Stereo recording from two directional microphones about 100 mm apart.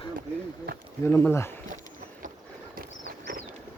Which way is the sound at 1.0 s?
25° left (ahead or behind).